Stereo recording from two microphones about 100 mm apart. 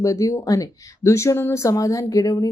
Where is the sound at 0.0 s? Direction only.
35° left (ahead or behind).